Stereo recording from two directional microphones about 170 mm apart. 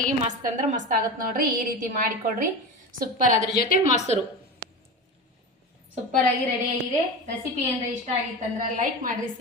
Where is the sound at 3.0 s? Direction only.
50° right (ahead or behind).